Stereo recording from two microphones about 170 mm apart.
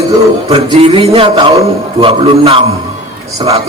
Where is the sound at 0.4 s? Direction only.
35° right (ahead or behind).